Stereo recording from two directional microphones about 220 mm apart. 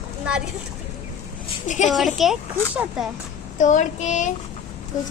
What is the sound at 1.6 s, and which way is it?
Child singing, 35° left (ahead or behind).